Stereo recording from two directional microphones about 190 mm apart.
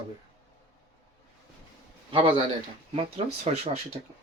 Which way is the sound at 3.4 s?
35° right (ahead or behind).